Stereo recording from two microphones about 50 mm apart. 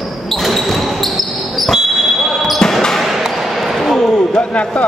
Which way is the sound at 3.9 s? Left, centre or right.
Centre.